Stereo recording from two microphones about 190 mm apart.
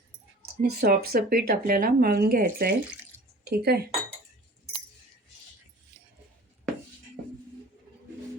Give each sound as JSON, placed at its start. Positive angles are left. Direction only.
{"t": 0.6, "sound": "speech", "side_deg": -55}